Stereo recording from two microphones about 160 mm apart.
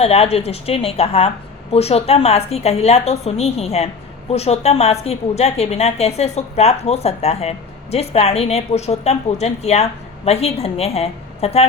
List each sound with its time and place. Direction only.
0.0 s a woman's voice: 40° left (ahead or behind)